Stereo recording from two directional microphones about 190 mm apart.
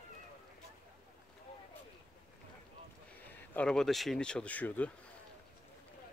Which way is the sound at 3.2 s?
10° left (ahead or behind).